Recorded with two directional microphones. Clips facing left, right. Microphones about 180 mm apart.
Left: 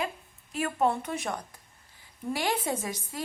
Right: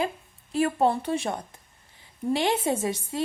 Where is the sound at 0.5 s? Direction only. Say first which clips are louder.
Right 4 dB; 30° right (ahead or behind).